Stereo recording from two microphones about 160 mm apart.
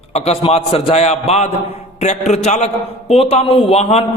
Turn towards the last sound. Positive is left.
turn(degrees=40)  # may be behind; listen again after turning